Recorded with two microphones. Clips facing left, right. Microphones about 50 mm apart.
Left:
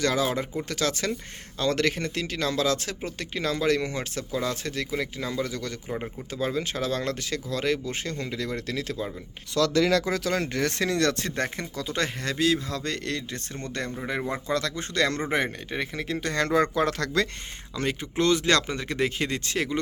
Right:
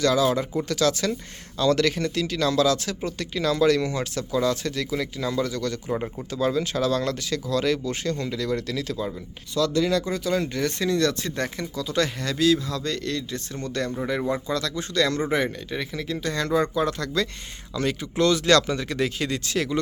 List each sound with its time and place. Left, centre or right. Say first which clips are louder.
0.0 s speech: right 4 dB; left
9.6 s speech: even; left
17.7 s speech: right 3 dB; left